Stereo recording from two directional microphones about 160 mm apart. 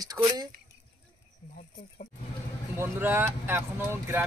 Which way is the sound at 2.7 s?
15° right (ahead or behind).